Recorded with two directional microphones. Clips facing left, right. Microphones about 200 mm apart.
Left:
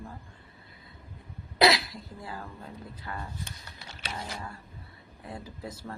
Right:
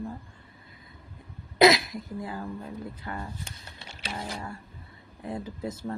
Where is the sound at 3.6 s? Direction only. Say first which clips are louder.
Right 1 dB; 25° right (ahead or behind).